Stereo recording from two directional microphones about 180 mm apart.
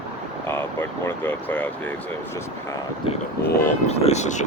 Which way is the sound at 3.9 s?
35° left (ahead or behind).